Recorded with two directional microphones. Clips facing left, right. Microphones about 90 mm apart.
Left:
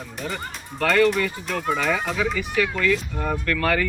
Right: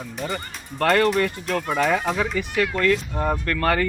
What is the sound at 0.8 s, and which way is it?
Speech, 50° right (ahead or behind).